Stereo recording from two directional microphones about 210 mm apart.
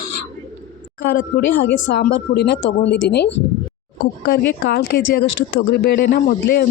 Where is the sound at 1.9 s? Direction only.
55° left (ahead or behind).